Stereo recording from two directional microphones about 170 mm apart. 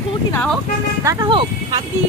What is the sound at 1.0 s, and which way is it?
Speech, 20° right (ahead or behind).